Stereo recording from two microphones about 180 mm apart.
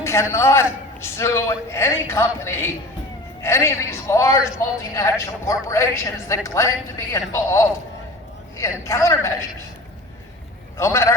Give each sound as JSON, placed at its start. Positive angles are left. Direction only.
{"t": 0.0, "sound": "a woman's voice", "side_deg": 15}
{"t": 10.8, "sound": "a woman's voice", "side_deg": 15}